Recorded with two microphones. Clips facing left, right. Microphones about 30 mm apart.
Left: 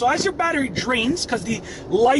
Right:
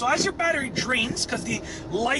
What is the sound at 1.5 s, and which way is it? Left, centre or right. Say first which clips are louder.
Speech: left 7 dB; centre.